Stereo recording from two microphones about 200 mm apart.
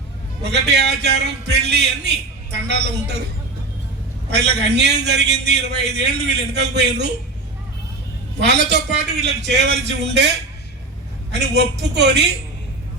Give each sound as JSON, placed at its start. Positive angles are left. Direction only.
{"t": 0.4, "sound": "a man's voice", "side_deg": -55}
{"t": 4.3, "sound": "a man's voice", "side_deg": -55}
{"t": 8.4, "sound": "a man's voice", "side_deg": -60}